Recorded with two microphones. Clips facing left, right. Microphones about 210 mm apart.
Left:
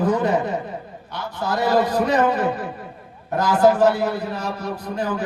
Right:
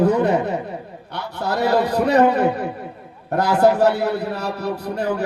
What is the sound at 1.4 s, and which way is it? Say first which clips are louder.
A man's voice: right 1 dB; 65° right (ahead or behind).